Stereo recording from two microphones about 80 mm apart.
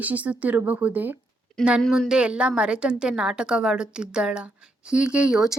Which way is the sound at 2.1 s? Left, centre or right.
Centre.